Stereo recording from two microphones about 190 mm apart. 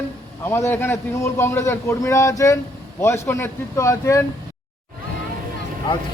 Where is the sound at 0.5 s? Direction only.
10° left (ahead or behind).